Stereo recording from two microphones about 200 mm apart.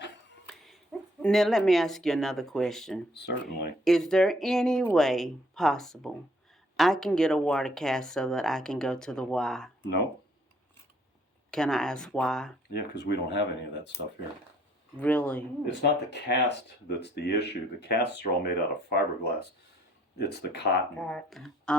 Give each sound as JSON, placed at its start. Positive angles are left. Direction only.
{"t": 0.4, "sound": "dog", "side_deg": 0}
{"t": 1.2, "sound": "speech", "side_deg": 0}
{"t": 3.1, "sound": "speech", "side_deg": 55}
{"t": 3.8, "sound": "speech", "side_deg": 0}
{"t": 11.5, "sound": "speech", "side_deg": 0}
{"t": 12.7, "sound": "speech", "side_deg": 60}
{"t": 14.9, "sound": "speech", "side_deg": 10}
{"t": 15.6, "sound": "speech", "side_deg": 55}
{"t": 21.0, "sound": "speech", "side_deg": 0}